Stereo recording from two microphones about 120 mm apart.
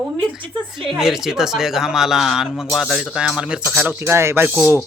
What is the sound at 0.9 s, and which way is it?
Speech, 5° right (ahead or behind).